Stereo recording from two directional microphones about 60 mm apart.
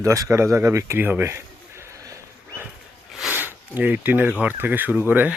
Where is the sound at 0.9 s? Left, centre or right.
Right.